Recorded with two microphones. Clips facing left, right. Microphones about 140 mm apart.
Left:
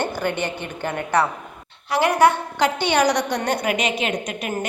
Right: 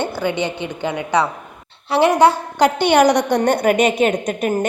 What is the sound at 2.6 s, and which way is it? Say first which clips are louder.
A woman's voice: right 8 dB; 50° right (ahead or behind).